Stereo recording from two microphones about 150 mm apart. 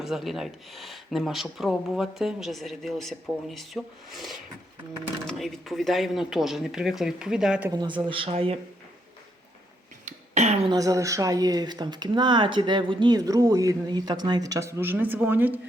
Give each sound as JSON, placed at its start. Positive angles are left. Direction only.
{"t": 0.0, "sound": "speech", "side_deg": 0}
{"t": 7.7, "sound": "speech", "side_deg": -30}
{"t": 10.1, "sound": "a sound", "side_deg": -50}
{"t": 10.7, "sound": "speech", "side_deg": -20}